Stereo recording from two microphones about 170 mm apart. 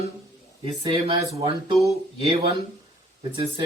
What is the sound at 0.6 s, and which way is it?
Speech, 35° right (ahead or behind).